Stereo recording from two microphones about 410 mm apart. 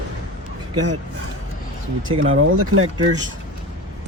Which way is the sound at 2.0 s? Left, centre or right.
Right.